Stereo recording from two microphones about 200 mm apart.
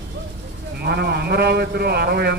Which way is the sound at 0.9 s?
55° right (ahead or behind).